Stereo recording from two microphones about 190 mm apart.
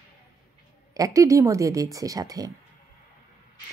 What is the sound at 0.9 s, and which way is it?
Speech, 20° right (ahead or behind).